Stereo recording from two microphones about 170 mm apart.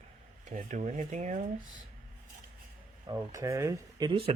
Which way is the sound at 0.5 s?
45° right (ahead or behind).